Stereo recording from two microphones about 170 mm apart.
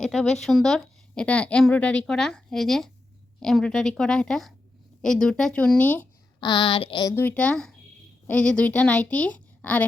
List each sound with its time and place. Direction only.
0.0 s a woman's voice: 5° left (ahead or behind)
6.4 s speech: 25° left (ahead or behind)
7.2 s a woman's voice: 10° left (ahead or behind)